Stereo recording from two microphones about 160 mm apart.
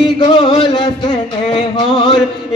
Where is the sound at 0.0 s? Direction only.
30° left (ahead or behind).